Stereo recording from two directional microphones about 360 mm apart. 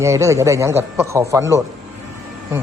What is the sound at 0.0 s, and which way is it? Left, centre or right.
Speech, centre.